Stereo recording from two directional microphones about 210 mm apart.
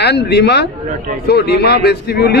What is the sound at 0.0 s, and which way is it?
Speech, 50° left (ahead or behind).